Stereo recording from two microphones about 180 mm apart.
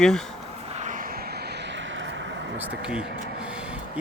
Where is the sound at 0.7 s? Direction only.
40° right (ahead or behind); by 2.7 s 80° right.